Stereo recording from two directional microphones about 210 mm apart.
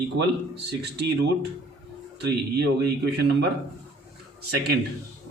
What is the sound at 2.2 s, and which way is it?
Speech, 50° right (ahead or behind).